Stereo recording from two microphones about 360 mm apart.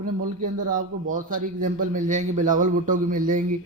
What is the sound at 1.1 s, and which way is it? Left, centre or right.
Speech, right.